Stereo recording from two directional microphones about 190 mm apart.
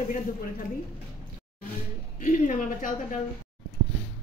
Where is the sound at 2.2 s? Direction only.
40° left (ahead or behind).